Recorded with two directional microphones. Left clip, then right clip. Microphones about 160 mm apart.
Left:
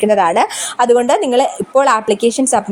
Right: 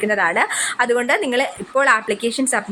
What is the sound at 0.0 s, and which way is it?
A woman's voice, 40° left (ahead or behind).